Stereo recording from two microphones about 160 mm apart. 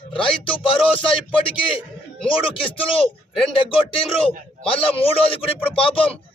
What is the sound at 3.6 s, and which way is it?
A man's voice, 35° left (ahead or behind).